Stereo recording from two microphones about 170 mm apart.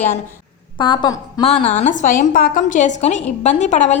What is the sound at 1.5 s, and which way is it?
A woman's voice, 40° left (ahead or behind).